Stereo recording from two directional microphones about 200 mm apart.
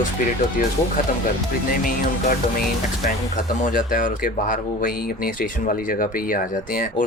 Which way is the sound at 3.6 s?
45° left (ahead or behind).